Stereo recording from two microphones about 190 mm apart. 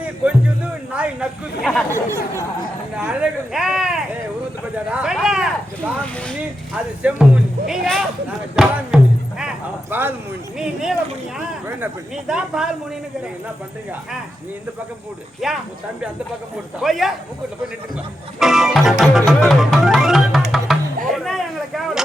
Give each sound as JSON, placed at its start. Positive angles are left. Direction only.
{"t": 0.9, "sound": "speech", "side_deg": -5}
{"t": 1.9, "sound": "speech", "side_deg": -15}
{"t": 15.4, "sound": "speech", "side_deg": 0}
{"t": 16.8, "sound": "speech", "side_deg": 0}
{"t": 18.3, "sound": "music", "side_deg": 0}